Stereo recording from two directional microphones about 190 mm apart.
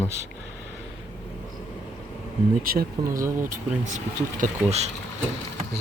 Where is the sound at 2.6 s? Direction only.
50° right (ahead or behind).